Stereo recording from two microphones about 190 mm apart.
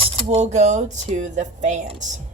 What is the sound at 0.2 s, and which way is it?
A woman's voice, 30° right (ahead or behind).